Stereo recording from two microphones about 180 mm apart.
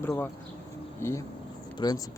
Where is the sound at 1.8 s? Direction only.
25° left (ahead or behind).